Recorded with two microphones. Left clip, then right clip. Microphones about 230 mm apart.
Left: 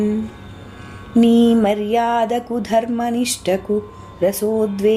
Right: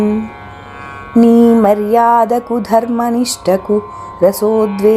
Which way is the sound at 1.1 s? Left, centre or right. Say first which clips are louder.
Right 6 dB; centre.